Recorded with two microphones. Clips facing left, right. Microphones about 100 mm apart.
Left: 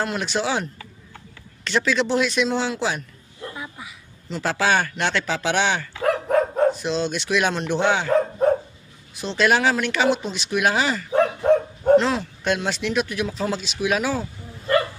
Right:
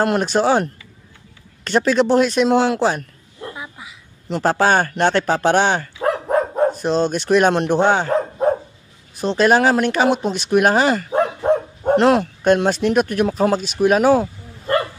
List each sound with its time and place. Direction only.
0.0 s speech: 50° right (ahead or behind)
4.3 s speech: 45° right (ahead or behind)
6.0 s dog: 25° right (ahead or behind)
6.7 s speech: 45° right (ahead or behind)
9.2 s speech: 40° right (ahead or behind)
11.1 s dog: 25° right (ahead or behind)
11.9 s speech: 55° right (ahead or behind)